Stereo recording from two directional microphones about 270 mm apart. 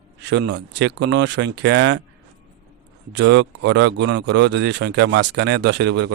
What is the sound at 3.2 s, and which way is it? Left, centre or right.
Speech, right.